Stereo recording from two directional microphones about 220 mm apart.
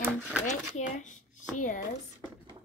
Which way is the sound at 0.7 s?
35° left (ahead or behind).